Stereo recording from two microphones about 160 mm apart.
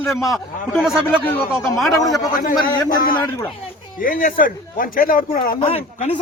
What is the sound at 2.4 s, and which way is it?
Speech, 55° left (ahead or behind).